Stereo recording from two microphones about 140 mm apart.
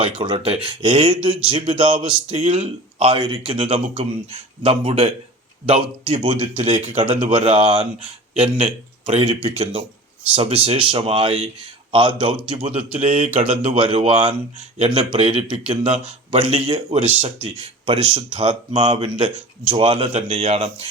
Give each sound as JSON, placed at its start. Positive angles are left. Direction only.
{"t": 0.0, "sound": "speech", "side_deg": -45}
{"t": 13.0, "sound": "speech", "side_deg": -55}